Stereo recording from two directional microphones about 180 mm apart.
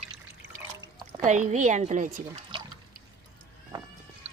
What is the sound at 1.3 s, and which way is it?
Speech, 40° right (ahead or behind).